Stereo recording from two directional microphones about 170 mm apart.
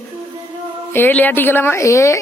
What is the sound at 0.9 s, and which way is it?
A woman's voice, 10° left (ahead or behind).